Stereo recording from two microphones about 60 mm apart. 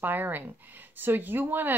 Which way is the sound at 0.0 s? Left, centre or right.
Right.